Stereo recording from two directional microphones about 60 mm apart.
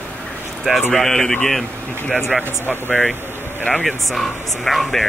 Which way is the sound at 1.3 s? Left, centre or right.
Left.